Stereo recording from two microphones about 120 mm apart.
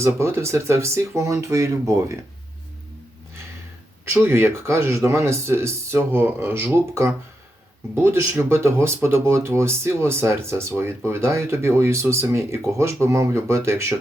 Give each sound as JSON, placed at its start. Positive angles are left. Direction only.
{"t": 0.0, "sound": "speech", "side_deg": -20}
{"t": 4.1, "sound": "speech", "side_deg": -20}
{"t": 7.9, "sound": "speech", "side_deg": -20}